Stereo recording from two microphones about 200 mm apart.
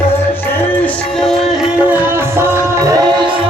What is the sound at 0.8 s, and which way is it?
Music, centre (ahead or behind).